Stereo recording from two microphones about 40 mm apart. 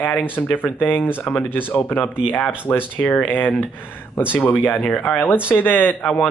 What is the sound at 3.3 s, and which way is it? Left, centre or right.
Speech, left.